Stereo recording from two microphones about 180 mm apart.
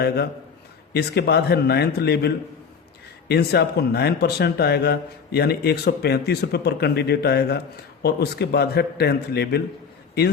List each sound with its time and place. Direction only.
0.9 s speech: 65° left (ahead or behind)